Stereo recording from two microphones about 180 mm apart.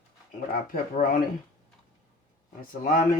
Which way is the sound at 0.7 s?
50° left (ahead or behind).